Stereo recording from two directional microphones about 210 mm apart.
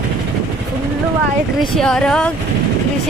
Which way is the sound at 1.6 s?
Centre (ahead or behind).